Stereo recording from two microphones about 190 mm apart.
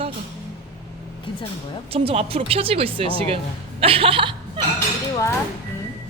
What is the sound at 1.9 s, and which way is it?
Speech, 30° right (ahead or behind).